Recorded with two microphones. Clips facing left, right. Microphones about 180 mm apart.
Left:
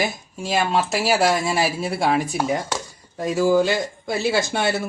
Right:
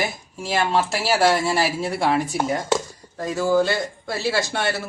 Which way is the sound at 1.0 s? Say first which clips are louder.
Right 1 dB; 15° left (ahead or behind).